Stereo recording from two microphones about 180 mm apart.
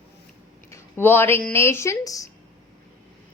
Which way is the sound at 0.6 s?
15° left (ahead or behind).